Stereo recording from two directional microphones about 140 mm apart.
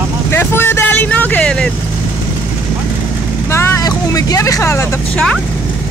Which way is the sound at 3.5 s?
20° left (ahead or behind).